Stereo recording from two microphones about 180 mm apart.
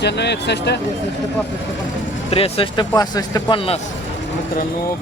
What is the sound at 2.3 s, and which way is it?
Speech, 30° left (ahead or behind).